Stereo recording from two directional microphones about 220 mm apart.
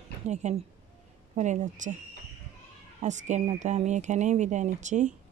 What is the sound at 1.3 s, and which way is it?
Speech, 30° right (ahead or behind).